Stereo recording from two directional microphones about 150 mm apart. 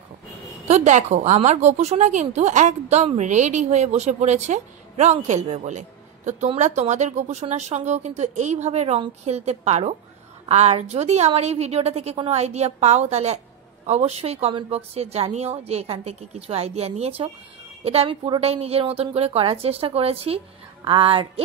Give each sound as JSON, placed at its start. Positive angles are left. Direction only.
{"t": 0.7, "sound": "a woman's voice", "side_deg": -50}